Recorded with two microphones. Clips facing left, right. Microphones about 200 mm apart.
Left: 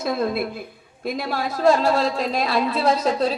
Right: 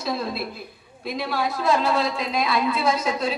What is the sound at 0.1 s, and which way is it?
A woman's voice, 50° left (ahead or behind).